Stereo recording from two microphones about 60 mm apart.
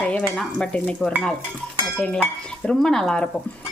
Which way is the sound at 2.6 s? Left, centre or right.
Centre.